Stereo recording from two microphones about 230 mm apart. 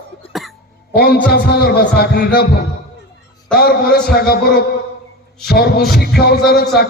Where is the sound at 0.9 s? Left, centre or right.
Left.